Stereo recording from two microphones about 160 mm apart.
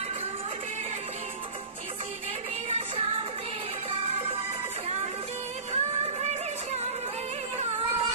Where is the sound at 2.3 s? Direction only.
40° right (ahead or behind).